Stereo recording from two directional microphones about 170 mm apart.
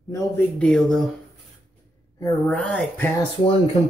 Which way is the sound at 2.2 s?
10° left (ahead or behind).